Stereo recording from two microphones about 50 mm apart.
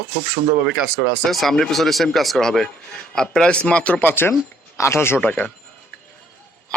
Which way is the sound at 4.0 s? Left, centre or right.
Left.